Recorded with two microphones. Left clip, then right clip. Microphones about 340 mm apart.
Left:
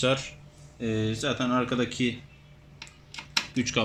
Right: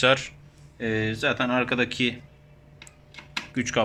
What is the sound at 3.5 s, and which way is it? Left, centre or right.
Speech, right.